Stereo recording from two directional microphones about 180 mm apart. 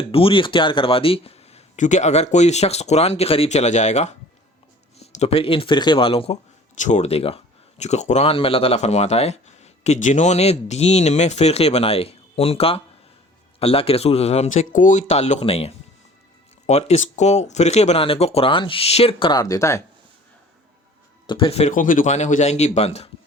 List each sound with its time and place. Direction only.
0.0 s speech: 30° left (ahead or behind)
21.2 s speech: 30° left (ahead or behind)